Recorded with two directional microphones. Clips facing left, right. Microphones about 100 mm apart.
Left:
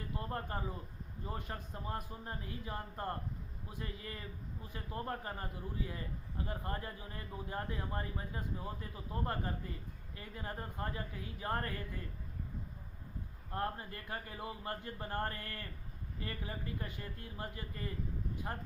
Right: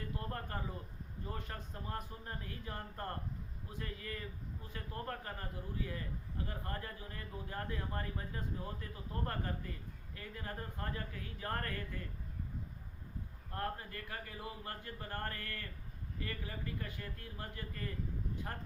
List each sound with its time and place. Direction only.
0.2 s a man's voice: 20° left (ahead or behind)
13.5 s a man's voice: 25° left (ahead or behind)